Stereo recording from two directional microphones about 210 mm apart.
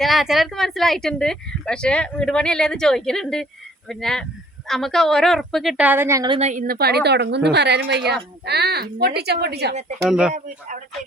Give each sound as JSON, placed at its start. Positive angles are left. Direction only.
{"t": 0.0, "sound": "speech", "side_deg": 0}
{"t": 6.5, "sound": "speech", "side_deg": -40}
{"t": 10.1, "sound": "speech", "side_deg": -5}